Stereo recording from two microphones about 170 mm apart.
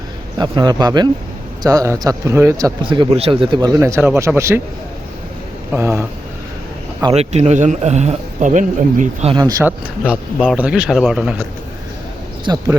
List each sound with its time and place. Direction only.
0.3 s a man's voice: 25° right (ahead or behind)
3.8 s speech: 15° right (ahead or behind)
5.7 s speech: 15° right (ahead or behind)
7.1 s a man's voice: 40° right (ahead or behind)
9.3 s a man's voice: 20° right (ahead or behind)
9.6 s speech: 5° right (ahead or behind)
12.5 s a man's voice: 25° right (ahead or behind)